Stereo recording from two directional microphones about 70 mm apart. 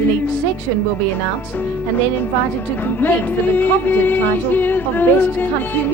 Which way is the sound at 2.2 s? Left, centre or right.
Left.